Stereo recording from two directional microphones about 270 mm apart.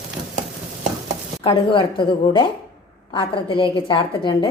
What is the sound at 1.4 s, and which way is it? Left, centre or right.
Speech, centre.